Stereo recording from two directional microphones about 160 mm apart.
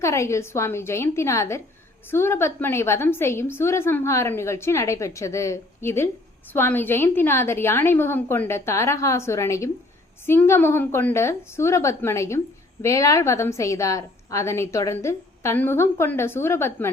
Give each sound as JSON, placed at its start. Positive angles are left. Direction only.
{"t": 0.0, "sound": "a woman's voice", "side_deg": 15}